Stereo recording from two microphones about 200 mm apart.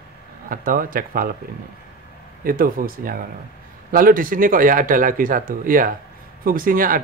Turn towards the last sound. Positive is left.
turn(degrees=-45)  # may be behind; listen again after turning